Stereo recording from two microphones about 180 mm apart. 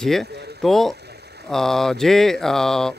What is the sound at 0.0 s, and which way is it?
Speech, centre (ahead or behind).